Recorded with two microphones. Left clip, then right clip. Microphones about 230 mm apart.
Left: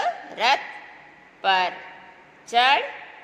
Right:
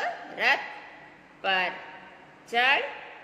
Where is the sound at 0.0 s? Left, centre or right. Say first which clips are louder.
Left 4 dB; centre.